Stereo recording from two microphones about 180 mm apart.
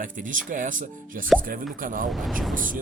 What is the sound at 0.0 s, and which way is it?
Speech, 45° right (ahead or behind).